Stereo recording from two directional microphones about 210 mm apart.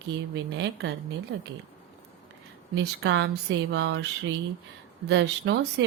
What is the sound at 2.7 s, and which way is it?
Speech, 60° right (ahead or behind).